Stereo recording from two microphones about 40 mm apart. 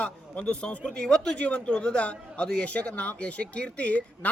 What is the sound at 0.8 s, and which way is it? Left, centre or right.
Speech, centre.